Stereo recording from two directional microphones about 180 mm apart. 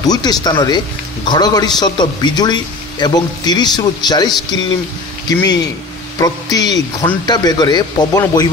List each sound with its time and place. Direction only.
0.0 s a man's voice: 20° left (ahead or behind)
6.1 s a man's voice: 20° left (ahead or behind)